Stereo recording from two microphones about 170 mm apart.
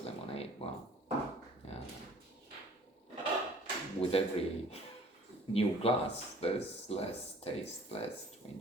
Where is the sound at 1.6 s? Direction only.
35° left (ahead or behind).